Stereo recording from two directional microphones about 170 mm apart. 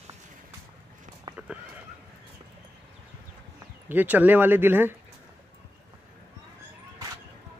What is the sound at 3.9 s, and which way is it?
A man's voice, 10° right (ahead or behind).